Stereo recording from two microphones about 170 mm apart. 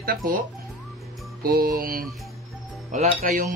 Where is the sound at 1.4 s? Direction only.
60° right (ahead or behind).